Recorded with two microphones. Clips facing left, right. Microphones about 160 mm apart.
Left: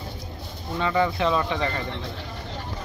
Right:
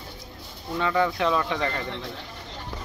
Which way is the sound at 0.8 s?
10° left (ahead or behind).